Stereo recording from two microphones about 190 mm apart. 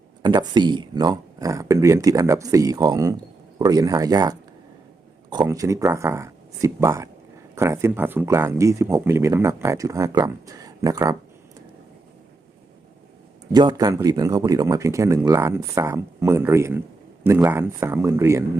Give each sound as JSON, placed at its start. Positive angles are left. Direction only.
{"t": 0.2, "sound": "speech", "side_deg": -25}
{"t": 13.5, "sound": "speech", "side_deg": -20}